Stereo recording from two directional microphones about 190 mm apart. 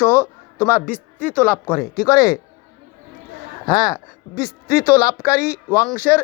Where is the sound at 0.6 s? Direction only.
10° left (ahead or behind).